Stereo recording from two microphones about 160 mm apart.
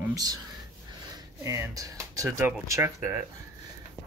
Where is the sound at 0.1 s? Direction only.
25° right (ahead or behind).